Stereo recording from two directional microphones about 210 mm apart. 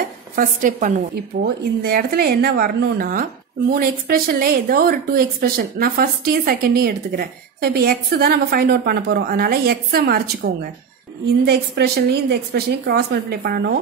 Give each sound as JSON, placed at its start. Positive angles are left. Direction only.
{"t": 0.4, "sound": "a woman's voice", "side_deg": -40}